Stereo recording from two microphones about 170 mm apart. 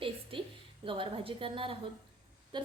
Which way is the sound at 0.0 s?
30° right (ahead or behind).